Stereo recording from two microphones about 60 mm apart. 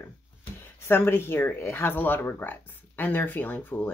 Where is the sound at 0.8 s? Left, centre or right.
Left.